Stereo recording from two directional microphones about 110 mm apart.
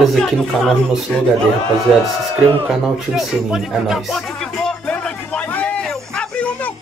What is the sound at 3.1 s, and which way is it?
Music, 5° right (ahead or behind).